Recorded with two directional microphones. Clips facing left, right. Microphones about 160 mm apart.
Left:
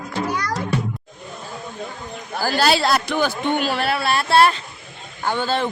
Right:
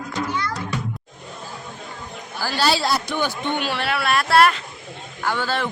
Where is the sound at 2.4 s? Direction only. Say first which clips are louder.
Left 3 dB; 50° left (ahead or behind); by 3.3 s 75° left (ahead or behind).